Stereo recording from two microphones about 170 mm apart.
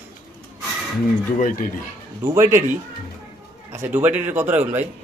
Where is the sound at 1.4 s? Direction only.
50° left (ahead or behind).